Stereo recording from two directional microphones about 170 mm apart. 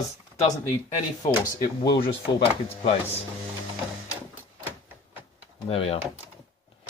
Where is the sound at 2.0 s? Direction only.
35° left (ahead or behind).